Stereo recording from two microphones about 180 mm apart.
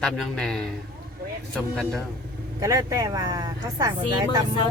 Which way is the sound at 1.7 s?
Centre (ahead or behind).